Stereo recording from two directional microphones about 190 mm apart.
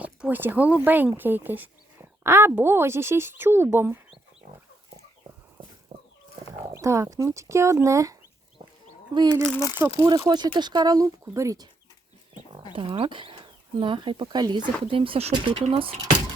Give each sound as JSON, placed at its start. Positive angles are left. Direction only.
{"t": 0.0, "sound": "speech", "side_deg": -10}
{"t": 6.5, "sound": "speech", "side_deg": -15}
{"t": 9.6, "sound": "speech", "side_deg": 20}
{"t": 10.0, "sound": "speech", "side_deg": -20}
{"t": 12.7, "sound": "speech", "side_deg": -30}